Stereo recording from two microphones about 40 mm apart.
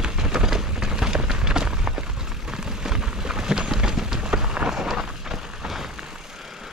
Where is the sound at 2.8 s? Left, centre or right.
Centre.